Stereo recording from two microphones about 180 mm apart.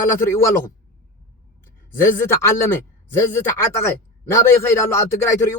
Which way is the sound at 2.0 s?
15° left (ahead or behind).